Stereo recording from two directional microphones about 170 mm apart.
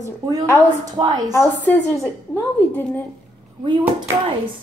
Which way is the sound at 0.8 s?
25° right (ahead or behind).